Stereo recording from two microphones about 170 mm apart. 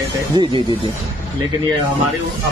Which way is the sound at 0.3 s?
30° right (ahead or behind).